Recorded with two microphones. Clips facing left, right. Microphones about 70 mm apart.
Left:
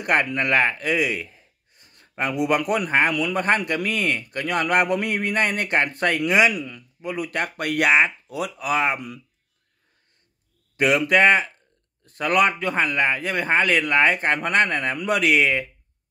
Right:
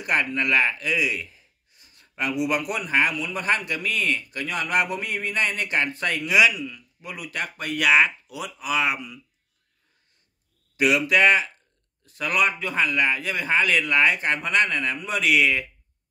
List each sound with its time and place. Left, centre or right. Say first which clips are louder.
0.0 s speech: left 3 dB; left
3.1 s speech: left 5 dB; left
3.3 s a man's voice: left 4 dB; left
8.7 s speech: left 2 dB; left
10.8 s a man's voice: left 2 dB; left
12.7 s a man's voice: left 1 dB; left
15.0 s speech: left 6 dB; left
15.3 s speech: right 3 dB; left